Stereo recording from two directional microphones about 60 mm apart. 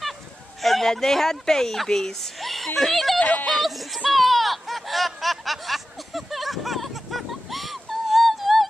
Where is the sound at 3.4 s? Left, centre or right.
Centre.